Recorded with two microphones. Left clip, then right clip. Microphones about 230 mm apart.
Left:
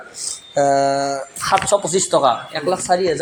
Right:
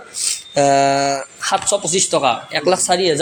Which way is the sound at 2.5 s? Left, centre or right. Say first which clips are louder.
Right 2 dB; right.